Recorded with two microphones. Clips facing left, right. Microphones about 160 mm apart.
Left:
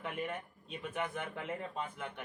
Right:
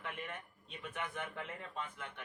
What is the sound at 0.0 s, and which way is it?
A man's voice, 40° left (ahead or behind).